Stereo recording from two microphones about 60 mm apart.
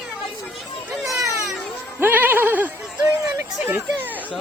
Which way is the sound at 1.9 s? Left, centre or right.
Right.